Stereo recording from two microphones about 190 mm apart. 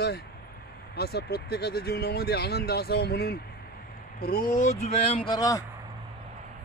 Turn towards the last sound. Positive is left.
turn(degrees=20)  # may be behind; listen again after turning